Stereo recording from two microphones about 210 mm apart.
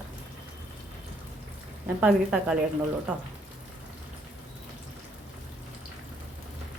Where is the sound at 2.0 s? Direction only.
5° right (ahead or behind).